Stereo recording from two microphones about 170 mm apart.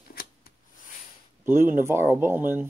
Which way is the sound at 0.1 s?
65° left (ahead or behind).